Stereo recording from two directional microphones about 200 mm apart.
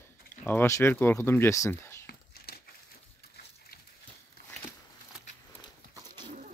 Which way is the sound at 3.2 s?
50° left (ahead or behind).